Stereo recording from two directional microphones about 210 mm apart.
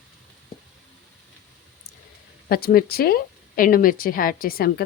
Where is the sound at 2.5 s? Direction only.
45° left (ahead or behind).